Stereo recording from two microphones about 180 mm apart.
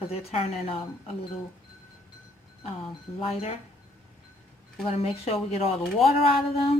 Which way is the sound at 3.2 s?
35° left (ahead or behind).